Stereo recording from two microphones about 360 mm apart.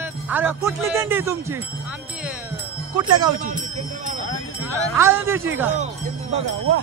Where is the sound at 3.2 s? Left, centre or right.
Right.